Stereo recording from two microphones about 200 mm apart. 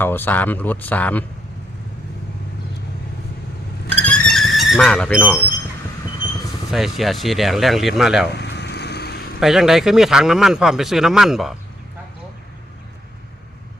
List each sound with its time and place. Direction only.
0.0 s speech: 10° left (ahead or behind)
4.0 s a sound: 5° left (ahead or behind)
6.7 s speech: centre (ahead or behind)
8.3 s vehicle: 60° left (ahead or behind)
9.4 s speech: centre (ahead or behind)